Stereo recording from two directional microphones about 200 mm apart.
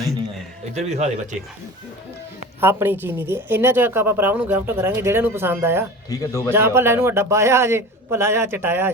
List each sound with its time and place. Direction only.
0.7 s speech: 35° right (ahead or behind)
2.6 s a woman's voice: 10° right (ahead or behind)
6.1 s a man's voice: 15° left (ahead or behind)
6.5 s a woman's voice: 10° right (ahead or behind)